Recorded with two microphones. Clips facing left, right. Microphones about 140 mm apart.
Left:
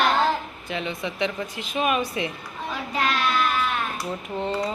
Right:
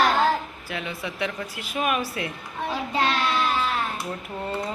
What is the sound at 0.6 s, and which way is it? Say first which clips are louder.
A woman's voice: left 3 dB; 5° right (ahead or behind).